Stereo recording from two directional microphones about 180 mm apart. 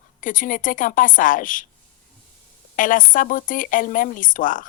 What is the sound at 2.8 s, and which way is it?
Speech, 50° left (ahead or behind).